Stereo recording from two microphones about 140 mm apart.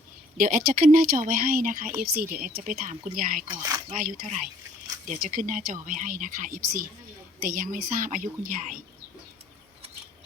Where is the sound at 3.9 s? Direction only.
75° right (ahead or behind).